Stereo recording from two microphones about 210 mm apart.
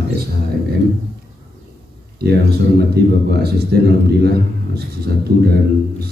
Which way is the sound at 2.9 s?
50° right (ahead or behind).